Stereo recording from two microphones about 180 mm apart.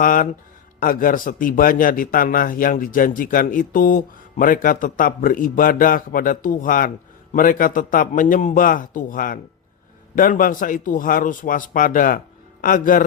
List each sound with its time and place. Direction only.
0.0 s a man's voice: 50° left (ahead or behind)